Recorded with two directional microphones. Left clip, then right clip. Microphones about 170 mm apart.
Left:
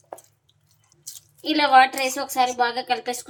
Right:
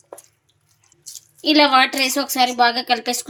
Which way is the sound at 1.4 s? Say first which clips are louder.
Right 2 dB; 50° right (ahead or behind).